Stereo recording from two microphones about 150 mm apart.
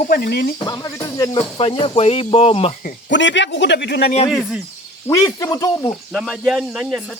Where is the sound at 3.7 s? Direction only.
90° left.